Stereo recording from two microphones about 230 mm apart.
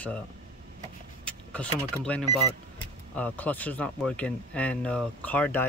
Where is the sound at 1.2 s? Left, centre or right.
Centre.